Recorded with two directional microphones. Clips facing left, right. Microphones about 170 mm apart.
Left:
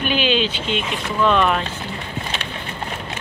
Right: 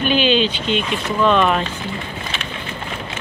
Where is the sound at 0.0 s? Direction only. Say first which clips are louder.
Right 3 dB; 5° left (ahead or behind).